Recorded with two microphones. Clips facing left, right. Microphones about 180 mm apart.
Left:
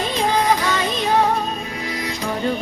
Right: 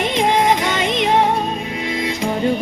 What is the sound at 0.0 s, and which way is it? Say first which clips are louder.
Music: right 3 dB; 25° right (ahead or behind).